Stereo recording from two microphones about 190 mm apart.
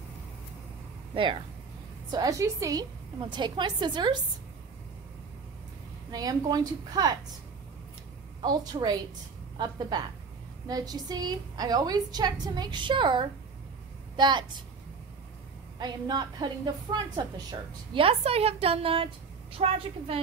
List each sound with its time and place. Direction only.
1.1 s a woman's voice: 25° right (ahead or behind)
6.1 s a woman's voice: 20° right (ahead or behind)
8.4 s a woman's voice: 25° right (ahead or behind)
15.8 s a woman's voice: 20° right (ahead or behind)